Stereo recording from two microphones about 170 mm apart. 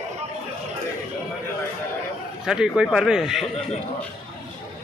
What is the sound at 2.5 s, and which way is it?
Speech, 5° right (ahead or behind).